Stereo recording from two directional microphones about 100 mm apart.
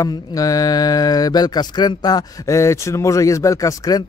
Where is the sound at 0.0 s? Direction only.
35° left (ahead or behind).